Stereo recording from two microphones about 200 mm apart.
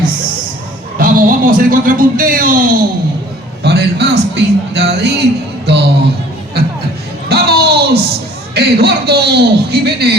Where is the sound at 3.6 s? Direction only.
55° right (ahead or behind).